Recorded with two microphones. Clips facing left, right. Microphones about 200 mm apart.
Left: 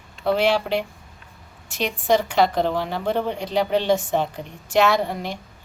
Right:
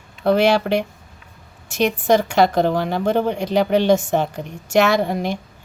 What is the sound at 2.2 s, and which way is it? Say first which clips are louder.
Speech: right 4 dB; 45° right (ahead or behind).